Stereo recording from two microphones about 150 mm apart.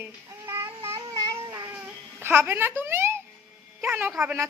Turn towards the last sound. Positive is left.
turn(degrees=-5)  # may be behind; listen again after turning